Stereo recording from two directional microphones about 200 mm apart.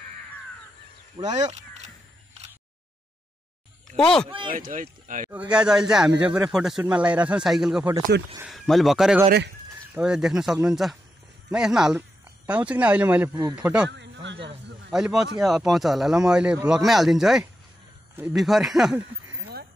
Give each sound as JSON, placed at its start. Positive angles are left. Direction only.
{"t": 1.2, "sound": "speech", "side_deg": -35}
{"t": 3.8, "sound": "speech", "side_deg": 5}
{"t": 4.3, "sound": "speech", "side_deg": -25}
{"t": 4.6, "sound": "speech", "side_deg": -40}
{"t": 5.3, "sound": "speech", "side_deg": -5}
{"t": 13.6, "sound": "speech", "side_deg": -5}
{"t": 13.8, "sound": "speech", "side_deg": -60}
{"t": 14.9, "sound": "speech", "side_deg": 0}